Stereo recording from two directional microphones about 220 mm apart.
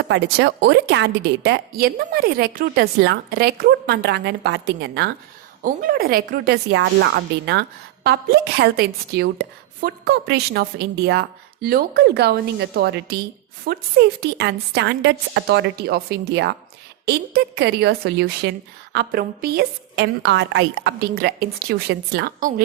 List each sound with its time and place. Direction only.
0.1 s a woman's voice: 50° right (ahead or behind)
14.2 s a woman's voice: 50° right (ahead or behind)